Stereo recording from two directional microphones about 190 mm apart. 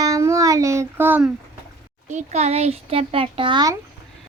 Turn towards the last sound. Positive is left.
turn(degrees=-25)  # may be behind; listen again after turning